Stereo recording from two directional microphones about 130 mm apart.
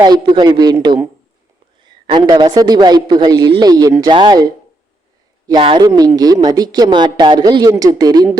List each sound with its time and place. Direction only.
0.0 s a man's voice: 35° right (ahead or behind)